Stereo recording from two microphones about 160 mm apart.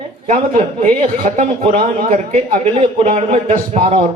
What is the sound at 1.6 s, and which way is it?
A man's voice, 40° right (ahead or behind).